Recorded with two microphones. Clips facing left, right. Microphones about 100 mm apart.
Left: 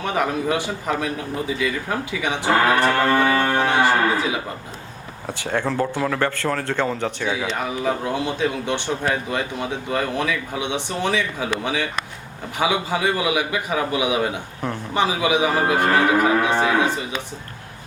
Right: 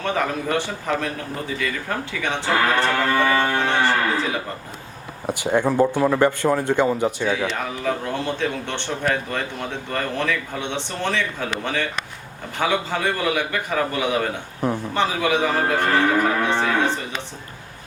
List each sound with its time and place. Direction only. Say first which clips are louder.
0.0 s speech: left 1 dB; 15° left (ahead or behind)
5.2 s speech: right 4 dB; 15° right (ahead or behind)
7.3 s speech: right 1 dB; 10° left (ahead or behind)